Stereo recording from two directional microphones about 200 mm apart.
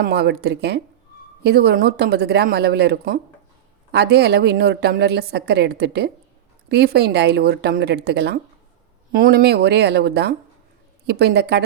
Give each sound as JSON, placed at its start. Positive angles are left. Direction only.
{"t": 0.0, "sound": "a woman's voice", "side_deg": -55}